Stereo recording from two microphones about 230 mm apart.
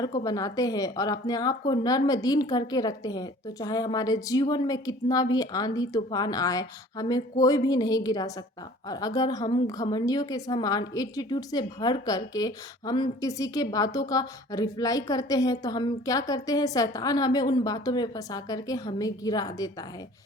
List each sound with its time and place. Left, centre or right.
0.2 s a woman's voice: centre